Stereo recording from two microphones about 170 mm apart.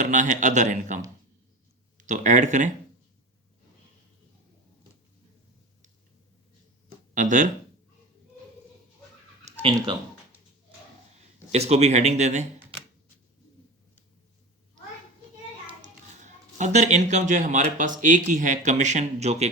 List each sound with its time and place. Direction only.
0.0 s speech: 45° right (ahead or behind)
7.1 s speech: 45° right (ahead or behind)
9.4 s a sound: 35° right (ahead or behind)
11.5 s a man's voice: 40° right (ahead or behind)
15.8 s speech: 45° right (ahead or behind)